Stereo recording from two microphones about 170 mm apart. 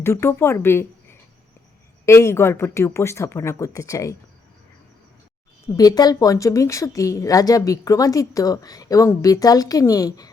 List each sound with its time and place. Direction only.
0.0 s speech: 15° left (ahead or behind)
2.0 s speech: 15° left (ahead or behind)
5.6 s a woman's voice: 20° left (ahead or behind)